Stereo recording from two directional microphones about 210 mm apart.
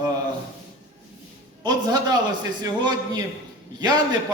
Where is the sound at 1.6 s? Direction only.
20° right (ahead or behind).